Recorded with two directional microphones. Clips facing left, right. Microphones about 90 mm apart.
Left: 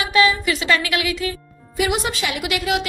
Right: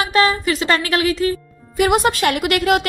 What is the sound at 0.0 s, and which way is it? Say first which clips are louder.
Music: right 1 dB; 40° right (ahead or behind).